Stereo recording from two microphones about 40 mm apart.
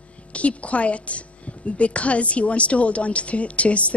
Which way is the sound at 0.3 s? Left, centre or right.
Left.